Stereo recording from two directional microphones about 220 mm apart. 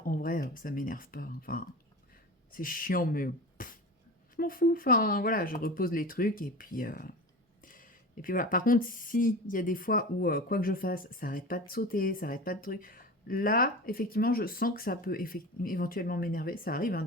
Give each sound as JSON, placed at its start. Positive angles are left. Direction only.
{"t": 0.0, "sound": "speech", "side_deg": 40}